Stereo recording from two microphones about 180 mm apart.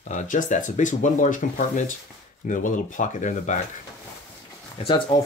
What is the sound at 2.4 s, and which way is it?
Speech, 45° left (ahead or behind).